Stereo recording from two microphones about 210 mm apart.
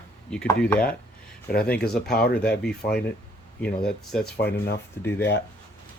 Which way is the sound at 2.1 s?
45° left (ahead or behind).